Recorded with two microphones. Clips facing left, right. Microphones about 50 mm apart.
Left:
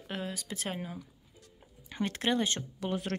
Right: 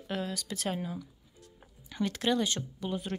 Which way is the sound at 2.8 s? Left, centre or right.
Left.